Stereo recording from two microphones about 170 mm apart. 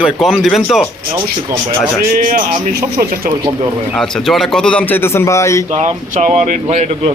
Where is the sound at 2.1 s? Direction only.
50° right (ahead or behind).